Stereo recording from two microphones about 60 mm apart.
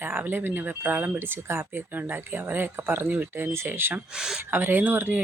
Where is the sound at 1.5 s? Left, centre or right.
Right.